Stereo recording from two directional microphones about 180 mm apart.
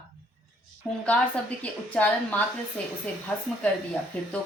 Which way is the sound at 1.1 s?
10° left (ahead or behind).